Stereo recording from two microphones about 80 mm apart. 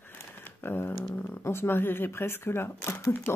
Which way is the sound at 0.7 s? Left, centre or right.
Left.